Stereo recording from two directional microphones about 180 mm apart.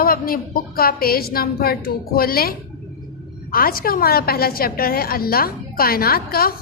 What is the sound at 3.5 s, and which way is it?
A woman's voice, 55° left (ahead or behind).